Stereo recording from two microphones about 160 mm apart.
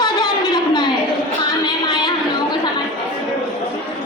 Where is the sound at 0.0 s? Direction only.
25° left (ahead or behind).